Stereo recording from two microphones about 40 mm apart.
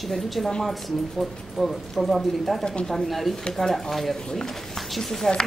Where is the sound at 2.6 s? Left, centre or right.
Left.